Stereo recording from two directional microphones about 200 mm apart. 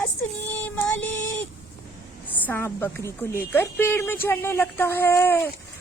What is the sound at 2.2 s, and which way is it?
Speech, 10° left (ahead or behind).